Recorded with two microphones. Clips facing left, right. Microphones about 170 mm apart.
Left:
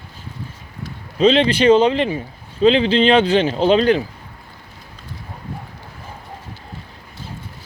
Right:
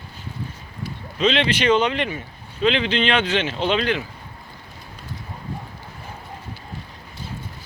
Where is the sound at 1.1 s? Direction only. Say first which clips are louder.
Left 6 dB; 35° left (ahead or behind).